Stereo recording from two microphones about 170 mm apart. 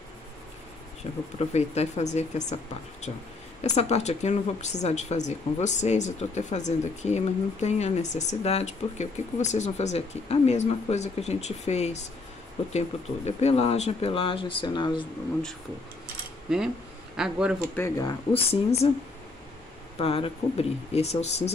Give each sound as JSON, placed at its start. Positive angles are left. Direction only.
{"t": 1.5, "sound": "speech", "side_deg": 40}
{"t": 3.6, "sound": "a woman's voice", "side_deg": 40}
{"t": 16.4, "sound": "speech", "side_deg": -5}
{"t": 17.7, "sound": "speech", "side_deg": 15}
{"t": 18.3, "sound": "speech", "side_deg": 35}
{"t": 20.0, "sound": "speech", "side_deg": 35}